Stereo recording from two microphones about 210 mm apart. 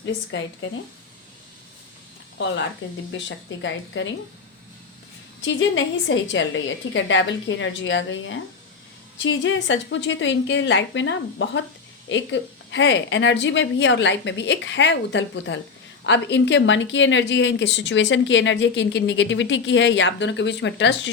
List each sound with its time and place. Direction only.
0.0 s speech: 60° left (ahead or behind)
3.1 s speech: 60° left (ahead or behind)
5.4 s speech: 60° left (ahead or behind)